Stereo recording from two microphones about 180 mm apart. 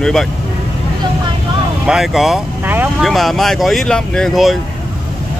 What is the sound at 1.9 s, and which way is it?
Speech, centre (ahead or behind).